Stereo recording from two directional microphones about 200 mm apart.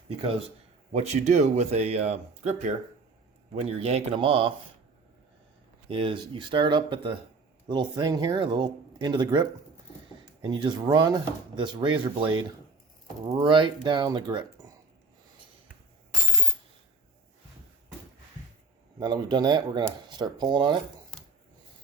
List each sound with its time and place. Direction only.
0.9 s speech: 35° right (ahead or behind)
5.9 s speech: 25° right (ahead or behind)
18.9 s speech: 20° right (ahead or behind)